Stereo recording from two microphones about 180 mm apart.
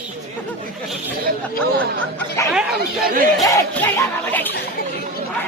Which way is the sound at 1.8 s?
10° left (ahead or behind).